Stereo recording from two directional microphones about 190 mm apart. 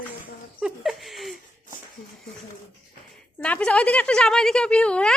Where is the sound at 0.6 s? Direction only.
Centre (ahead or behind).